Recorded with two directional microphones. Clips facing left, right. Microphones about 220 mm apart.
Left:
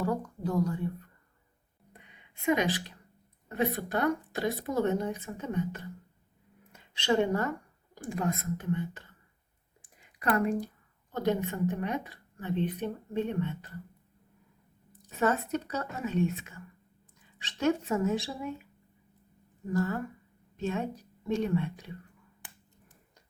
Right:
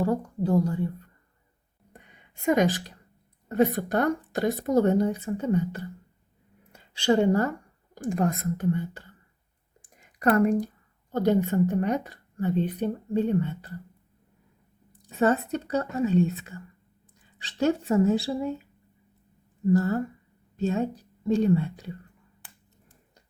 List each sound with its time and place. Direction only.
0.0 s whispering: 30° right (ahead or behind)
1.9 s a sound: 45° right (ahead or behind)
3.5 s a woman's voice: 45° right (ahead or behind)
7.0 s a woman's voice: 35° right (ahead or behind)
15.2 s a woman's voice: 30° right (ahead or behind)
17.6 s a woman's voice: 35° right (ahead or behind)
19.7 s a woman's voice: 40° right (ahead or behind)